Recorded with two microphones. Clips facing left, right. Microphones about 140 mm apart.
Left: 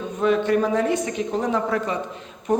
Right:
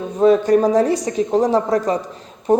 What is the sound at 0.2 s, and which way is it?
A woman's voice, 35° right (ahead or behind).